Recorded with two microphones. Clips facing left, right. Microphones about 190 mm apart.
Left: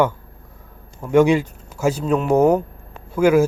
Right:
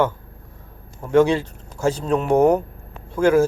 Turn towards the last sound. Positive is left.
turn(degrees=10)  # may be behind; listen again after turning